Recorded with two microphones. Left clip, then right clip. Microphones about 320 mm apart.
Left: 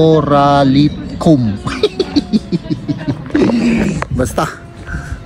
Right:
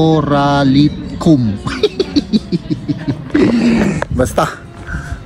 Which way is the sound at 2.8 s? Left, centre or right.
Centre.